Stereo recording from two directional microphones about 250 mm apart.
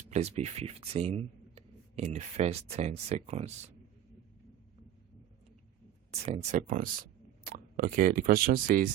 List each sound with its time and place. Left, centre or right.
0.1 s speech: right
6.1 s speech: right